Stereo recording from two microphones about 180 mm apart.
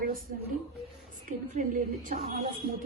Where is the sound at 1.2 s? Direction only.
50° right (ahead or behind).